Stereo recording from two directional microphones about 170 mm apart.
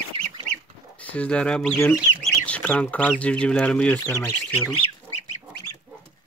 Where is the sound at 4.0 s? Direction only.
20° left (ahead or behind).